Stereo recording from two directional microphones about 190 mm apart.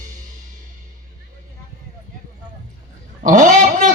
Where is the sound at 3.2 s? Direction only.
40° right (ahead or behind).